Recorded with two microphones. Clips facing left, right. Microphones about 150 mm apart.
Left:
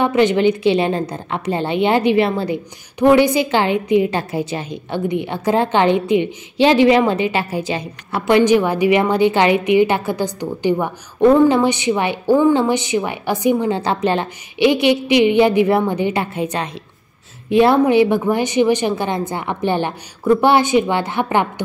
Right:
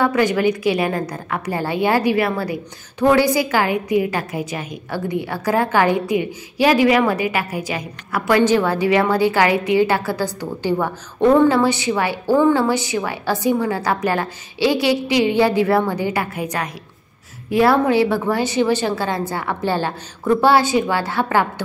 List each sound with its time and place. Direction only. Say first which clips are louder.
0.0 s a woman's voice: left 3 dB; 25° left (ahead or behind)